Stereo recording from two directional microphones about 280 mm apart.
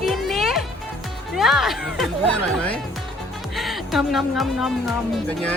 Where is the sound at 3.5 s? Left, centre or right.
Centre.